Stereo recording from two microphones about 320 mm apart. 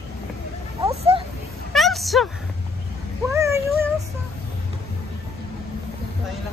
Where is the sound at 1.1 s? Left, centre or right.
Centre.